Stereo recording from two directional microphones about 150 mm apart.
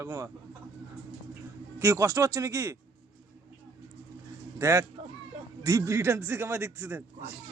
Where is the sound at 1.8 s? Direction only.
20° right (ahead or behind).